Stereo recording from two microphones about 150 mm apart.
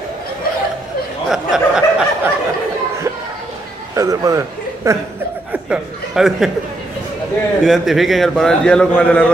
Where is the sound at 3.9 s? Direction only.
20° right (ahead or behind).